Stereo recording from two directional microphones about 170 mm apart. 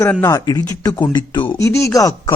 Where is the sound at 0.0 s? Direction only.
15° left (ahead or behind).